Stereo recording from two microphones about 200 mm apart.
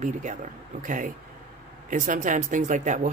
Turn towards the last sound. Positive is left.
turn(degrees=-40)  # may be behind; listen again after turning